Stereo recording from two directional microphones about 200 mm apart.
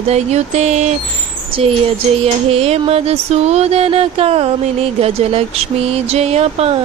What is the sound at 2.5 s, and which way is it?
Music, 30° right (ahead or behind).